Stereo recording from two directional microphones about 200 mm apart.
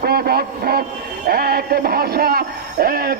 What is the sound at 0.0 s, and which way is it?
A man's voice, 50° right (ahead or behind).